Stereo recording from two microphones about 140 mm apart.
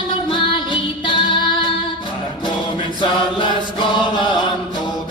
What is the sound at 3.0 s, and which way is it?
Chant, 35° left (ahead or behind).